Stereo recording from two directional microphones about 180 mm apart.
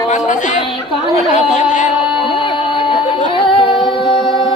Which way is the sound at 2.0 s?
5° right (ahead or behind).